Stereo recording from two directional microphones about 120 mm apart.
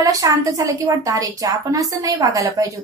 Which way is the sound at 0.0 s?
30° right (ahead or behind).